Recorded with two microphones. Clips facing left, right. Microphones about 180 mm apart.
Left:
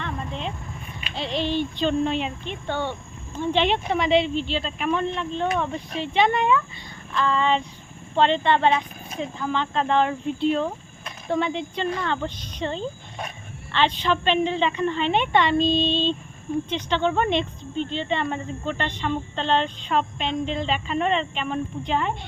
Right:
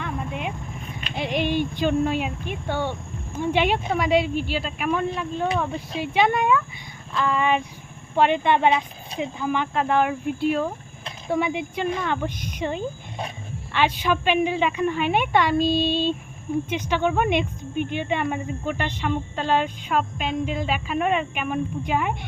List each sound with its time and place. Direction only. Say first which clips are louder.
0.0 s vehicle: right 1 dB; 10° right (ahead or behind)
1.1 s speech: right 1 dB; 15° right (ahead or behind)